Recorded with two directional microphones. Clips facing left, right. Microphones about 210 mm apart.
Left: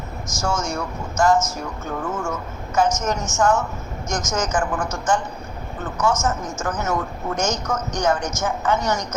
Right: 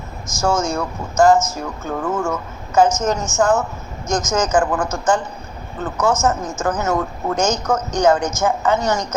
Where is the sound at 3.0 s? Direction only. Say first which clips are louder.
Right 3 dB; 30° right (ahead or behind).